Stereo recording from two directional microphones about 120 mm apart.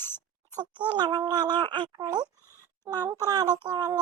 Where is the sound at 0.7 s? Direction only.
40° right (ahead or behind).